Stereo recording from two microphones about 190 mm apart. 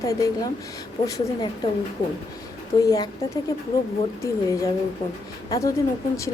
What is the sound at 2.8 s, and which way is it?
Speech, 20° left (ahead or behind).